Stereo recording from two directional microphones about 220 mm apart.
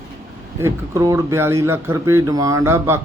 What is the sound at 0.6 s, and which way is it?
Speech, 10° right (ahead or behind).